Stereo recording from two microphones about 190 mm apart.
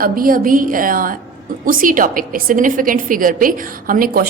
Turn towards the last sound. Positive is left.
turn(degrees=-50)  # may be behind; listen again after turning